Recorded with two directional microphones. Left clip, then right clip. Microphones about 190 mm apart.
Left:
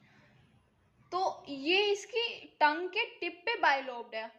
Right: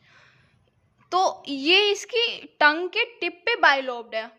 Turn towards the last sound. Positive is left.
turn(degrees=-40)  # may be behind; listen again after turning